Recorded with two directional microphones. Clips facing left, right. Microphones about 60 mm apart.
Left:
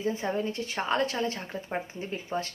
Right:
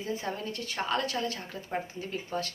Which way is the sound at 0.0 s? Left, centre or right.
Left.